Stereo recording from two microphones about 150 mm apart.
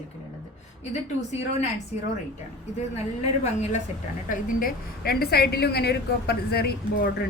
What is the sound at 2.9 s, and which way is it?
Speech, 45° left (ahead or behind).